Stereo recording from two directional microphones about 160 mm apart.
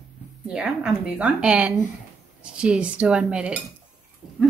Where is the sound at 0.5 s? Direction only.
5° right (ahead or behind).